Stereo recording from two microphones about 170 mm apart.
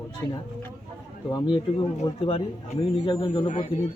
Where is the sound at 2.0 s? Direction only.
15° left (ahead or behind).